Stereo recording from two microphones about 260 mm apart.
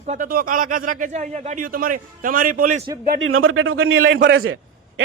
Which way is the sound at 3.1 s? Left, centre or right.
Right.